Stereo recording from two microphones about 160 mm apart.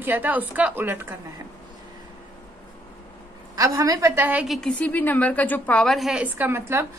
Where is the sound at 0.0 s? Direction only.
10° right (ahead or behind).